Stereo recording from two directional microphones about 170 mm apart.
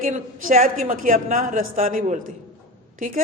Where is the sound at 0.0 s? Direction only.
55° right (ahead or behind).